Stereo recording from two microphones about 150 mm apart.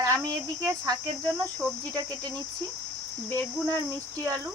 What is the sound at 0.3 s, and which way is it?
Speech, 20° right (ahead or behind).